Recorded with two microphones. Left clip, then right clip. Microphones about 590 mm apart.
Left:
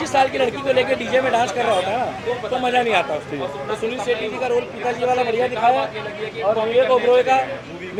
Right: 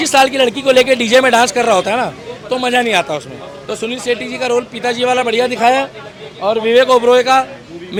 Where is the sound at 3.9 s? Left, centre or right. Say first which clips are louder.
Right 6 dB; right.